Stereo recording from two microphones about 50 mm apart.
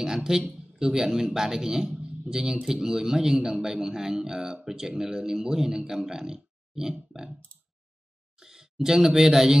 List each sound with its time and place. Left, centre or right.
0.0 s a sound: centre
0.6 s a man's voice: centre
8.4 s speech: centre